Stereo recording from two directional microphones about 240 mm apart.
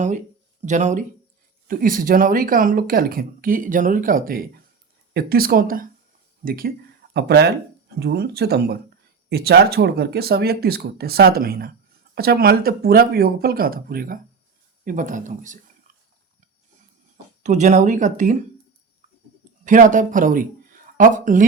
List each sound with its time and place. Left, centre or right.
0.6 s speech: right
17.4 s speech: right
19.6 s speech: right